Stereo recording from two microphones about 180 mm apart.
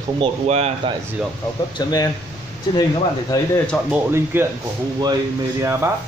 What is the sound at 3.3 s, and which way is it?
Speech, 20° left (ahead or behind).